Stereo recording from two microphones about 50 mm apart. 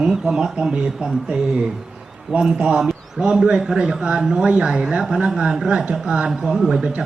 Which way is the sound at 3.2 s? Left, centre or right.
Centre.